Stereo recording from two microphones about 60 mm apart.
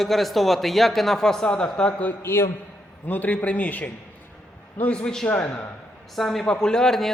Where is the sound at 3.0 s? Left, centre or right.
Left.